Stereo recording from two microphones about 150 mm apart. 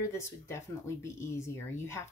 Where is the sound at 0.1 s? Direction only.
20° left (ahead or behind).